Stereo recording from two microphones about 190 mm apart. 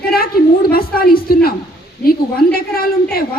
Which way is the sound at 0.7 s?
50° left (ahead or behind).